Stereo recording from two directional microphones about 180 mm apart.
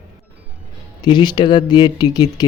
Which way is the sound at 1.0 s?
25° left (ahead or behind).